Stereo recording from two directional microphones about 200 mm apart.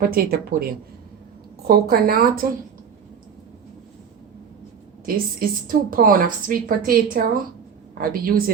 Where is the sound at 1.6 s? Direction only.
50° right (ahead or behind).